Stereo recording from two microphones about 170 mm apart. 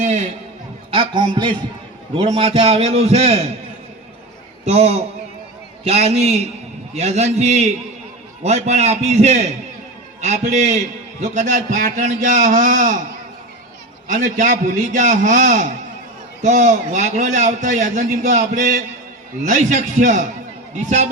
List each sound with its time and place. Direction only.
0.9 s a man's voice: 30° right (ahead or behind)
4.6 s a man's voice: 40° right (ahead or behind)
14.1 s a man's voice: 50° right (ahead or behind)